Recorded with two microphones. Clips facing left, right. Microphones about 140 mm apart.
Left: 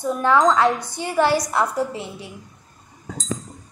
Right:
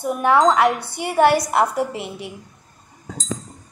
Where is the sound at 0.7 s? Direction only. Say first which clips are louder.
Right 1 dB; 65° right (ahead or behind).